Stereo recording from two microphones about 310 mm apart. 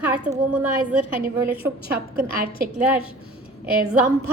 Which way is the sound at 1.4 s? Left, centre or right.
Right.